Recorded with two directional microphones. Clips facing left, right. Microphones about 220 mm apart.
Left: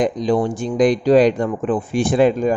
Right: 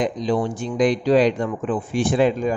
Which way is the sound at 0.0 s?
50° left (ahead or behind).